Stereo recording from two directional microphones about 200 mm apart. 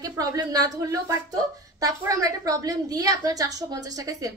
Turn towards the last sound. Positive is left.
turn(degrees=-15)  # may be behind; listen again after turning